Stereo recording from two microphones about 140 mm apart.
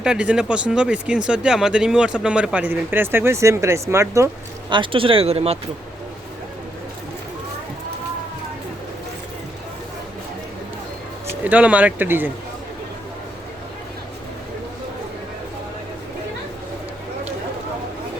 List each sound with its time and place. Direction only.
0.0 s speech: 5° right (ahead or behind)
4.7 s speech: 35° right (ahead or behind)
11.3 s speech: 10° right (ahead or behind)